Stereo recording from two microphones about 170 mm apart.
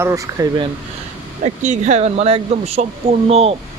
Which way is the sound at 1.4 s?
45° right (ahead or behind).